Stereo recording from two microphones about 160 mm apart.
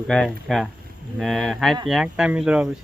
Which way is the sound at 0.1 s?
Centre (ahead or behind).